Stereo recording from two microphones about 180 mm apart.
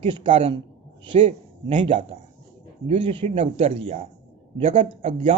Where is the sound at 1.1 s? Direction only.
40° right (ahead or behind).